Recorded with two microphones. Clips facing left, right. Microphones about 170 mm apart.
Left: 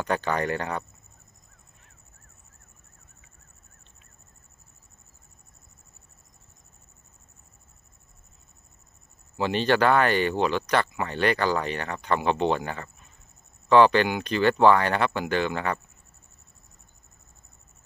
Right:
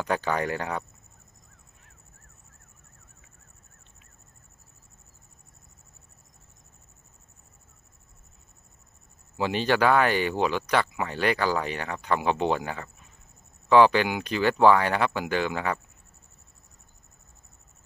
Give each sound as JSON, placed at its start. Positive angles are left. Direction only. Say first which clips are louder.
{"t": 0.0, "sound": "speech", "louder": "even", "side_deg": -5}
{"t": 9.4, "sound": "speech", "louder": "left 1 dB", "side_deg": -10}